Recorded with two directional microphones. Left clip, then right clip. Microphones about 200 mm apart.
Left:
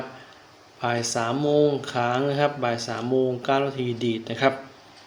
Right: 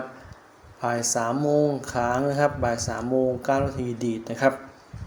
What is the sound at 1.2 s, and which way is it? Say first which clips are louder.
Speech: left 2 dB; 20° right (ahead or behind).